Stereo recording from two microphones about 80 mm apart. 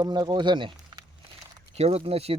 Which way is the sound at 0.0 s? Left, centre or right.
Right.